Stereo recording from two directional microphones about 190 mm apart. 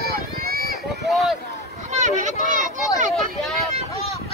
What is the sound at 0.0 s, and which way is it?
Run, 55° right (ahead or behind).